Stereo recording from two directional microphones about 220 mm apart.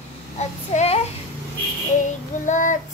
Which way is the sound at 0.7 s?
30° left (ahead or behind).